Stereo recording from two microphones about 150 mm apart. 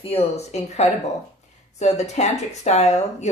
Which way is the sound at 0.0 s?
40° left (ahead or behind).